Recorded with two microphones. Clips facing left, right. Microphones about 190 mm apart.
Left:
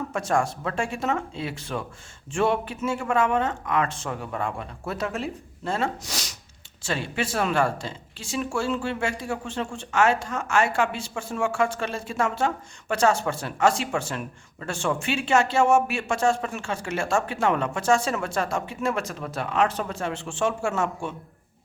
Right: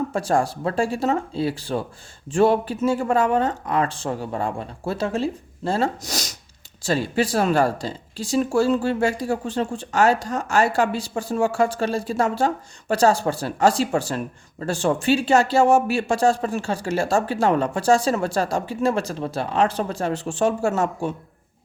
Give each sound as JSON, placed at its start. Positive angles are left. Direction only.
{"t": 0.1, "sound": "speech", "side_deg": -35}